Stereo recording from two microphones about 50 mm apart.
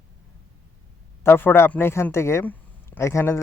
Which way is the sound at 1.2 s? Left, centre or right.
Left.